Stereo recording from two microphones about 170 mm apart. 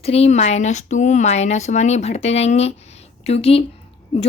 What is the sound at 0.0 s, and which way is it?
Speech, 35° left (ahead or behind).